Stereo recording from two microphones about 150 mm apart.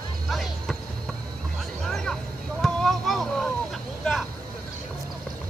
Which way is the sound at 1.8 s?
5° left (ahead or behind).